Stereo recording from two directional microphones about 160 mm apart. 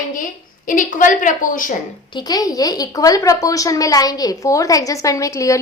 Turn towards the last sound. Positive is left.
turn(degrees=20)  # may be behind; listen again after turning